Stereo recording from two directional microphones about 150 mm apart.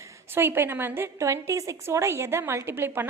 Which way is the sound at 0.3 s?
15° right (ahead or behind).